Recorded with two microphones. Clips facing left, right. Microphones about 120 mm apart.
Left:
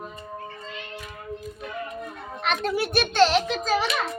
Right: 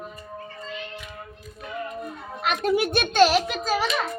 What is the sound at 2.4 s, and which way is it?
Children playing, 5° right (ahead or behind).